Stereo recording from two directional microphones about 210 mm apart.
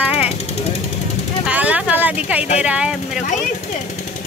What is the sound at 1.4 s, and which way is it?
Speech, 5° right (ahead or behind).